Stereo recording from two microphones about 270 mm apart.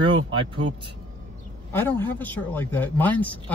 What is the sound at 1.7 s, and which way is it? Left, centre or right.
Speech, centre.